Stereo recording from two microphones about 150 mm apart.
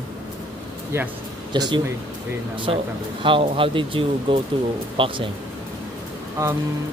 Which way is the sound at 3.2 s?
35° right (ahead or behind).